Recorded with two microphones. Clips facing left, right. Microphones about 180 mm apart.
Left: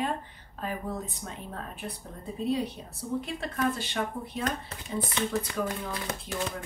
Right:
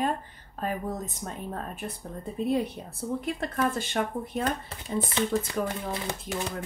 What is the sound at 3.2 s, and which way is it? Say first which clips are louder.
A woman's voice: right 3 dB; 50° right (ahead or behind).